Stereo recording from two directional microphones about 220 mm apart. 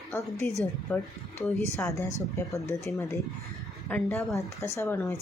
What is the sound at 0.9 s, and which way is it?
Speech, 5° left (ahead or behind).